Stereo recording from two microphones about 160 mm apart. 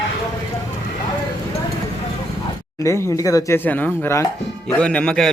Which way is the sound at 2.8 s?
20° left (ahead or behind).